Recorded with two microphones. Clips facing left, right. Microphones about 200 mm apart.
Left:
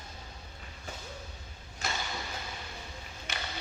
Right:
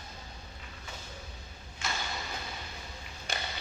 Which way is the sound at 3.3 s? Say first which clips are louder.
Right 3 dB; 35° right (ahead or behind).